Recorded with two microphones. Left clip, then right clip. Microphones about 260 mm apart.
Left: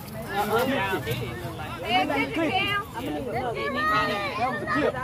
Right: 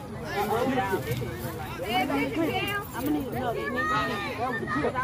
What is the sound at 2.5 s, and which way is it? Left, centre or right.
Speech, left.